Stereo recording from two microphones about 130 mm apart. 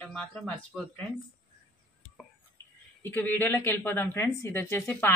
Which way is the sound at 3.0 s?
15° left (ahead or behind).